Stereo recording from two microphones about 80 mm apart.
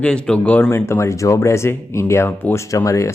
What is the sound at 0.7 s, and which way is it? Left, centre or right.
Speech, left.